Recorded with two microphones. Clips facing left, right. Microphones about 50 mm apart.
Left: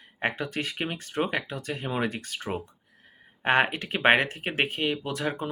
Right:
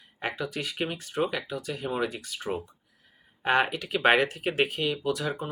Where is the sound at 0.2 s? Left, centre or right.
Left.